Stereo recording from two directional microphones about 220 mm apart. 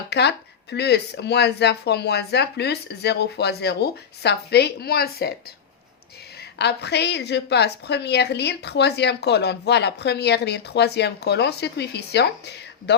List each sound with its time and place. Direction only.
0.1 s a woman's voice: 50° left (ahead or behind)
6.6 s a woman's voice: 50° left (ahead or behind)